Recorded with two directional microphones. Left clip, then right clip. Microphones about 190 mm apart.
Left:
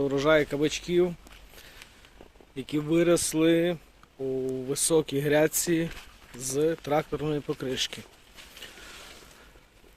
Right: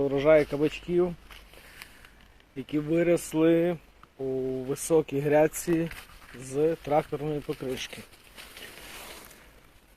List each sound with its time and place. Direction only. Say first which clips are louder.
0.0 s speech: right 2 dB; 20° left (ahead or behind)
2.6 s speech: left 1 dB; 20° left (ahead or behind)